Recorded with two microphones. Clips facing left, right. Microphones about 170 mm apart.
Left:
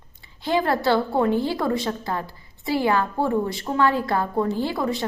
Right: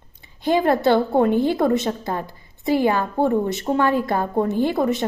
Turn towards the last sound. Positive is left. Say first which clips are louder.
# right 5 dB
turn(degrees=-20)  # may be behind; listen again after turning